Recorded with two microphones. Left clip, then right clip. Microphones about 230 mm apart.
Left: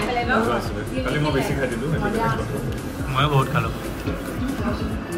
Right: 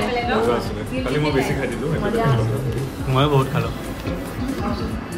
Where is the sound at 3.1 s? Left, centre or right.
Centre.